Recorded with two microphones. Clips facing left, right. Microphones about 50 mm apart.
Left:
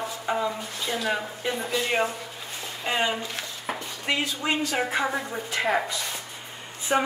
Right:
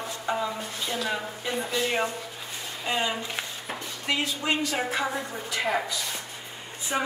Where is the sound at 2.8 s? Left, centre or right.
Centre.